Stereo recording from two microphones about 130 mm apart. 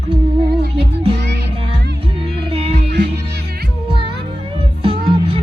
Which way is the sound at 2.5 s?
50° right (ahead or behind).